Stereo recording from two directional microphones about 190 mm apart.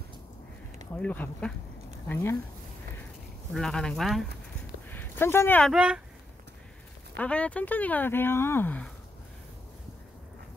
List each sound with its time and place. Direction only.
0.9 s speech: 10° left (ahead or behind)
3.5 s speech: 5° left (ahead or behind)
4.8 s a sound: 10° left (ahead or behind)
5.7 s speech: 5° right (ahead or behind)
7.2 s speech: 5° left (ahead or behind)